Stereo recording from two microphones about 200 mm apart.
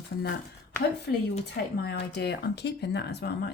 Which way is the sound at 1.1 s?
65° left (ahead or behind).